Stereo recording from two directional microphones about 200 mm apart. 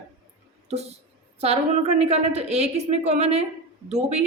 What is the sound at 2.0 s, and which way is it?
Speech, 35° right (ahead or behind).